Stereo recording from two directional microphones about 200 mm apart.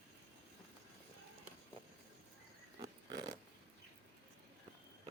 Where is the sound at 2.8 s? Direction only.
20° right (ahead or behind).